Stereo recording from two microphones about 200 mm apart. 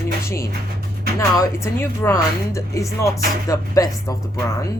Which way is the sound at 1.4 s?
15° left (ahead or behind).